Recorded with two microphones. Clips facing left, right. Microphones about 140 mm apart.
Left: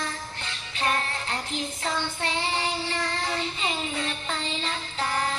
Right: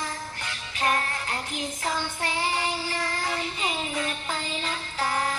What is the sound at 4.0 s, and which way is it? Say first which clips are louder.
Music: right 1 dB; 25° left (ahead or behind).